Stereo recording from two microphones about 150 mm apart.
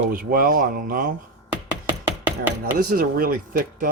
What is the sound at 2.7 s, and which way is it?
Speech, 75° right (ahead or behind).